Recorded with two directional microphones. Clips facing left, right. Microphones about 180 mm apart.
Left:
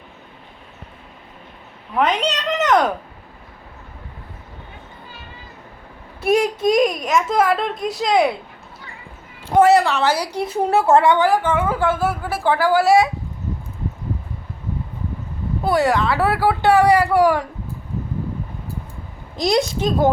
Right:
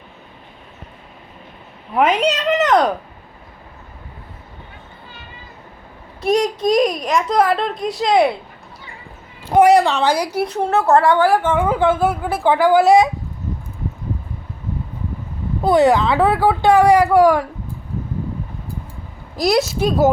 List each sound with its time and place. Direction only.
2.0 s a child's voice: 10° right (ahead or behind)
6.2 s a child's voice: 5° left (ahead or behind)
9.6 s speech: 15° right (ahead or behind)
10.4 s a woman's voice: 10° left (ahead or behind)
11.3 s a woman's voice: 15° right (ahead or behind)
15.6 s speech: 20° right (ahead or behind)
19.4 s a child's voice: 5° right (ahead or behind)